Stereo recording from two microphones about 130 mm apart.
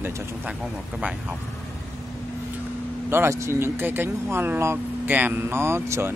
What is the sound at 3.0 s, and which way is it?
Speech, 20° right (ahead or behind).